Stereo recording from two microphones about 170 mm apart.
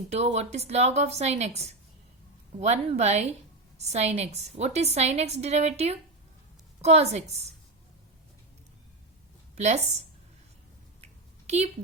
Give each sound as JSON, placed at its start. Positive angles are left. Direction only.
{"t": 0.1, "sound": "a woman's voice", "side_deg": -40}
{"t": 9.6, "sound": "speech", "side_deg": -40}
{"t": 11.0, "sound": "a sound", "side_deg": -40}